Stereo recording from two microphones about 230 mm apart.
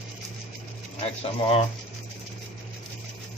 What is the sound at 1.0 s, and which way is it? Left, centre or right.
Speech, left.